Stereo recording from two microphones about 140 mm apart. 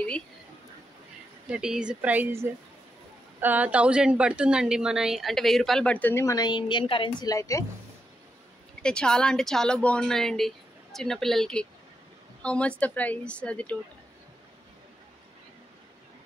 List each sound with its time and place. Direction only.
1.5 s a woman's voice: 5° right (ahead or behind); by 7.2 s 35° left (ahead or behind)
7.2 s speech: 20° left (ahead or behind)
8.8 s a woman's voice: 5° left (ahead or behind)